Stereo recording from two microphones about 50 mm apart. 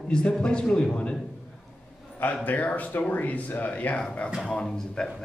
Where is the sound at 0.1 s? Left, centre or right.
Centre.